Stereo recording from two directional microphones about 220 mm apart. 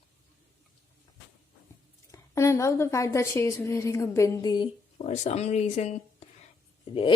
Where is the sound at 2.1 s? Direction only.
15° left (ahead or behind).